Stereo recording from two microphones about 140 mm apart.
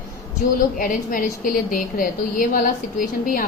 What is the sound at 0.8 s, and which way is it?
A woman's voice, 80° left.